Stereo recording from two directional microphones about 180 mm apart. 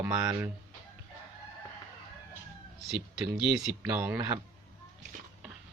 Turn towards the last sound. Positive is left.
turn(degrees=-15)  # may be behind; listen again after turning